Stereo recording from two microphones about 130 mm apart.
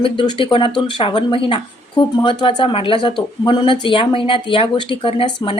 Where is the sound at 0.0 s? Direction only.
40° left (ahead or behind).